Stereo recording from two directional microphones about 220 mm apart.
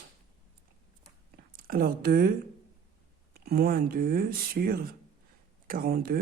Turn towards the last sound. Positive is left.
turn(degrees=-40)  # may be behind; listen again after turning